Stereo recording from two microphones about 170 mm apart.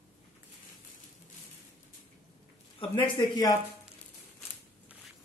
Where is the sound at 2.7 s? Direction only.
30° left (ahead or behind).